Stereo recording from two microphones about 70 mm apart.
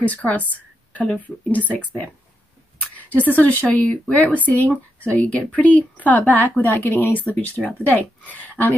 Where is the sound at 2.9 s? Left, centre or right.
Left.